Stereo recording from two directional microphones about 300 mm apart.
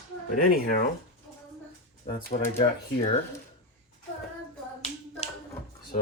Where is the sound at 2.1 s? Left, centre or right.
Left.